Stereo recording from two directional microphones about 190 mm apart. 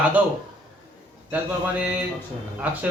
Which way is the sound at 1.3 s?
10° right (ahead or behind).